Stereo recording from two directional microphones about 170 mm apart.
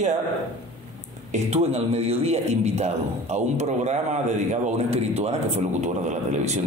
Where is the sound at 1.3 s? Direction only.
40° right (ahead or behind).